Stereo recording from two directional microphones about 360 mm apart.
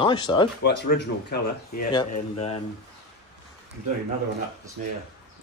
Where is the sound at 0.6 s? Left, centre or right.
Left.